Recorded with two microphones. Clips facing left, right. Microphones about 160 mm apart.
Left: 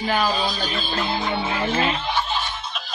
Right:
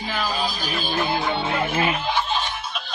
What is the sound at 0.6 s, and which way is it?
Speech, 10° right (ahead or behind).